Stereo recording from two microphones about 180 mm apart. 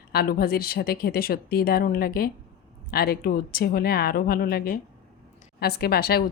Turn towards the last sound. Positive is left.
turn(degrees=60)  # may be behind; listen again after turning